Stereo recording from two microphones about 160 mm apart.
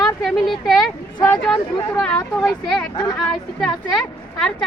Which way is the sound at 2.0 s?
5° left (ahead or behind).